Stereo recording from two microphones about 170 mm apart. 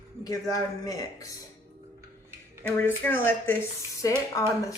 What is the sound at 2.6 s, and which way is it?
Speech, 10° left (ahead or behind).